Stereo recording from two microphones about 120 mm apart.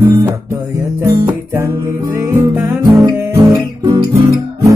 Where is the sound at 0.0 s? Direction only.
25° right (ahead or behind).